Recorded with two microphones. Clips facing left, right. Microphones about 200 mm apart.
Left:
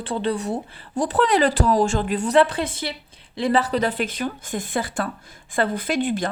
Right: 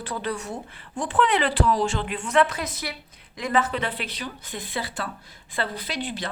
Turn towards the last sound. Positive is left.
turn(degrees=50)  # may be behind; listen again after turning